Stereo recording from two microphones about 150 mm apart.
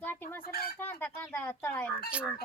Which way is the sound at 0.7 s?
15° left (ahead or behind).